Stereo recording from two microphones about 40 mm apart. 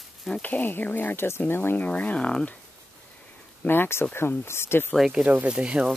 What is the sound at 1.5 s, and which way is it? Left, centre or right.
Speech, left.